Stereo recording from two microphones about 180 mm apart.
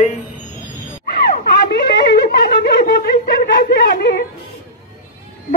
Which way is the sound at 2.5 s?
55° left (ahead or behind).